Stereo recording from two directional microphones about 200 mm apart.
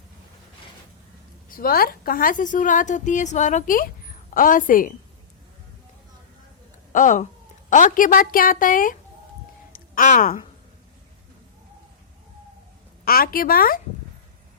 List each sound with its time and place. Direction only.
1.5 s a woman's voice: 45° left (ahead or behind)
6.9 s a woman's voice: 40° left (ahead or behind)
13.1 s a woman's voice: 45° left (ahead or behind)